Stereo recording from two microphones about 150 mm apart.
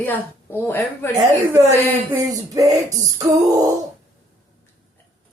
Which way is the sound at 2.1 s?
20° right (ahead or behind).